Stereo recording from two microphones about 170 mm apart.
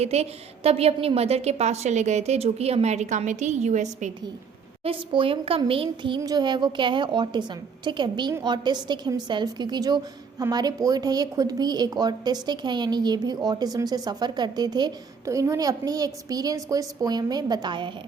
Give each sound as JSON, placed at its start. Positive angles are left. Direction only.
{"t": 0.0, "sound": "a woman's voice", "side_deg": -40}
{"t": 4.8, "sound": "speech", "side_deg": -30}